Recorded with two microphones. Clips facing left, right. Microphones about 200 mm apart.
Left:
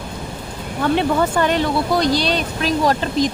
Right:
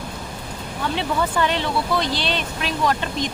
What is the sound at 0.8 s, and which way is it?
Speech, 50° left (ahead or behind).